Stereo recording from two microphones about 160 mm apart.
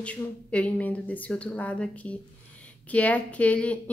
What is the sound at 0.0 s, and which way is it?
A woman's voice, 10° left (ahead or behind).